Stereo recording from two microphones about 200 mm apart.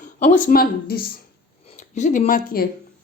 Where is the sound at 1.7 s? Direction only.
40° left (ahead or behind).